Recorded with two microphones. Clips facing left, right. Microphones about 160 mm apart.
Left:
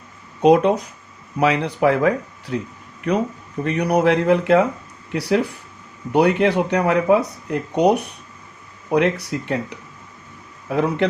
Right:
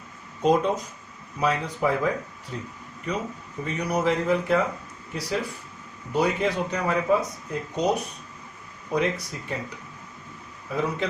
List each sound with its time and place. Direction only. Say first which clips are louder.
0.4 s speech: left 7 dB; 70° left (ahead or behind)